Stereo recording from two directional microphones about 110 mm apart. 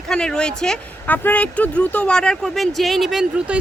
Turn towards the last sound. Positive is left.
turn(degrees=-5)  # may be behind; listen again after turning